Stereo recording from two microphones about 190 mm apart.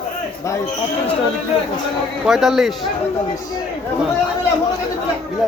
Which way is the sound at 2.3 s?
Centre (ahead or behind).